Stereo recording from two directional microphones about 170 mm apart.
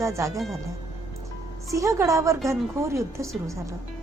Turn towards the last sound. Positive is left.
turn(degrees=-20)  # may be behind; listen again after turning